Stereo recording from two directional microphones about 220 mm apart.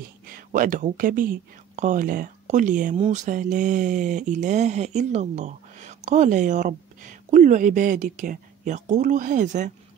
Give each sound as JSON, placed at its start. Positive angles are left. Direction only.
{"t": 0.4, "sound": "speech", "side_deg": -40}